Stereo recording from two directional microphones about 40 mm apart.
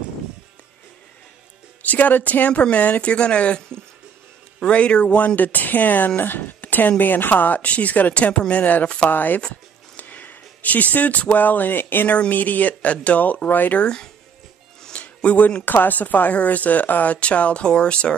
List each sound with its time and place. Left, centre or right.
1.8 s a woman's voice: left
5.1 s speech: left
6.6 s speech: left
8.8 s speech: left
9.1 s speech: left
12.3 s speech: left
13.8 s speech: centre
14.9 s a sound: left
15.6 s a woman's voice: left